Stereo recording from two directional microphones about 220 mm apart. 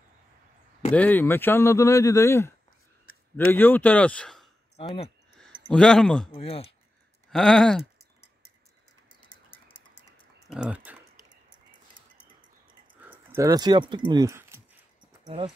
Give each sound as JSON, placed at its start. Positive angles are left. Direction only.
{"t": 0.9, "sound": "speech", "side_deg": 10}
{"t": 3.5, "sound": "speech", "side_deg": 10}
{"t": 5.7, "sound": "speech", "side_deg": 5}
{"t": 6.3, "sound": "speech", "side_deg": 25}
{"t": 7.2, "sound": "speech", "side_deg": 5}
{"t": 10.5, "sound": "typing", "side_deg": -5}
{"t": 13.0, "sound": "speech", "side_deg": -10}
{"t": 15.2, "sound": "speech", "side_deg": -30}